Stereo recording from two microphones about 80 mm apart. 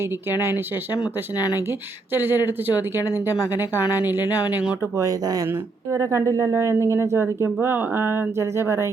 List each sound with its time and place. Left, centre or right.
2.1 s speech: right
4.9 s speech: right